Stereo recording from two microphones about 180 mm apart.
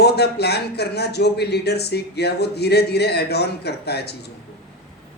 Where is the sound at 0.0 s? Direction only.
65° left (ahead or behind).